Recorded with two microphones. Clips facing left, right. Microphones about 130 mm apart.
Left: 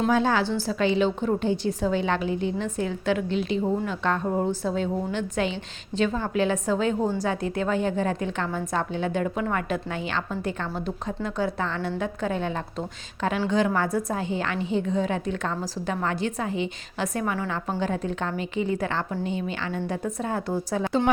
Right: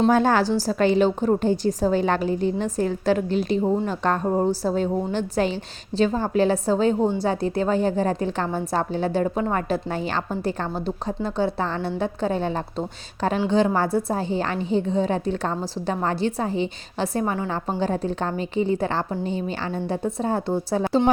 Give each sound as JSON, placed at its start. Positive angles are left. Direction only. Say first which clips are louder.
{"t": 0.1, "sound": "a woman's voice", "louder": "right 4 dB", "side_deg": -45}